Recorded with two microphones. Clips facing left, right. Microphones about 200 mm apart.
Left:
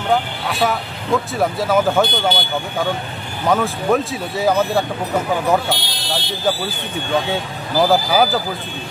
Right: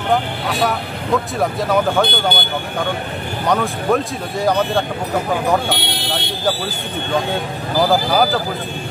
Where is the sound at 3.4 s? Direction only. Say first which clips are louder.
Left 1 dB; centre (ahead or behind).